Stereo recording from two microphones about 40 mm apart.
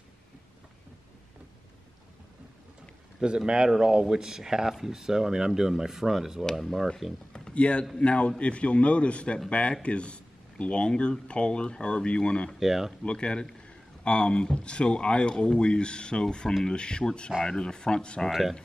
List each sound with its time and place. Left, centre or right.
3.2 s speech: right; by 6.9 s centre
7.5 s a man's voice: left
12.5 s speech: centre
13.0 s speech: left